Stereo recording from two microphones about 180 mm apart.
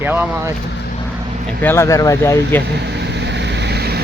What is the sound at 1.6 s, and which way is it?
Speech, 15° left (ahead or behind).